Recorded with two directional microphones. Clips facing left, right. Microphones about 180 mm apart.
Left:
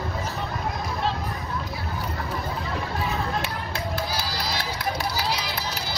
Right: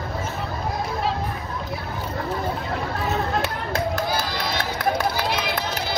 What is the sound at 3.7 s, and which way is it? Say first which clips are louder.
Run: right 7 dB; 50° right (ahead or behind).